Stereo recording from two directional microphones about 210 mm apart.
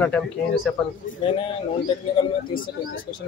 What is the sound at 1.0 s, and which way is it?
Speech, 40° left (ahead or behind).